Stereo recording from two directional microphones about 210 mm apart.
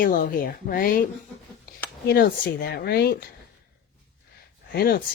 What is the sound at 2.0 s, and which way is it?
Speech, 45° left (ahead or behind).